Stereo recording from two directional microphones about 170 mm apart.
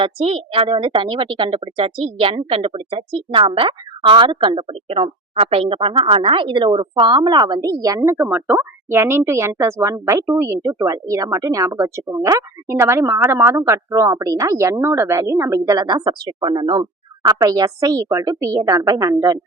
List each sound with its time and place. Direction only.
0.0 s a woman's voice: 35° right (ahead or behind)